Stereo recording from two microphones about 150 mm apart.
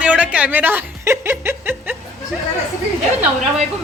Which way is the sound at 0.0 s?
10° right (ahead or behind).